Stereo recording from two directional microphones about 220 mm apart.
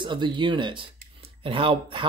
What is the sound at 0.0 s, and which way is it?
Speech, 20° right (ahead or behind).